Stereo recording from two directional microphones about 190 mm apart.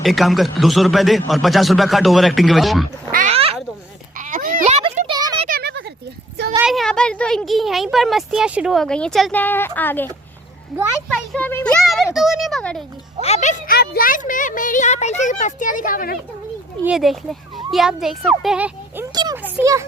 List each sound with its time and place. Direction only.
0.0 s speech: centre (ahead or behind)
3.1 s speech: 45° right (ahead or behind)
3.3 s a sound: 30° right (ahead or behind)
4.2 s a sound: 45° right (ahead or behind); by 5.5 s 25° right (ahead or behind)
5.5 s a sound: 55° right (ahead or behind)
6.7 s speech: centre (ahead or behind)
13.2 s a woman's voice: 35° left (ahead or behind)
16.8 s speech: centre (ahead or behind)
19.1 s a child's voice: 20° right (ahead or behind)